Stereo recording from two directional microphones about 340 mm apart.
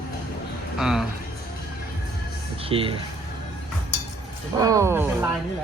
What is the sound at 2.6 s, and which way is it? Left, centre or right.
Speech, centre.